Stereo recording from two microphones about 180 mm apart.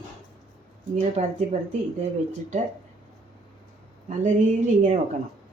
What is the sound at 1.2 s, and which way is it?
Speech, 40° right (ahead or behind).